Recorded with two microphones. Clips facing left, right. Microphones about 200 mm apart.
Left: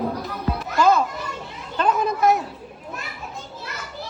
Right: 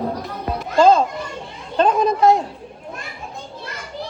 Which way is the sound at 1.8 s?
25° right (ahead or behind).